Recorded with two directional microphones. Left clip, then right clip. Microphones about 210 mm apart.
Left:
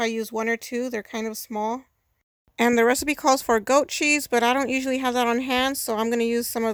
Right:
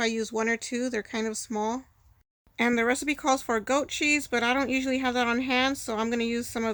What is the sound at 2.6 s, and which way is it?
Speech, 40° left (ahead or behind).